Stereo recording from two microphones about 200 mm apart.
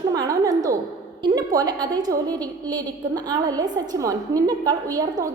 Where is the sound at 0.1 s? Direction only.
15° right (ahead or behind).